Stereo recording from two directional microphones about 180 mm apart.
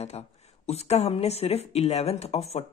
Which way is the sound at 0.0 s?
35° left (ahead or behind).